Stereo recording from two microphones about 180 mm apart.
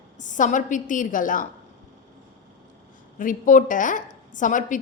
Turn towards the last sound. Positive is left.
turn(degrees=45)  # may be behind; listen again after turning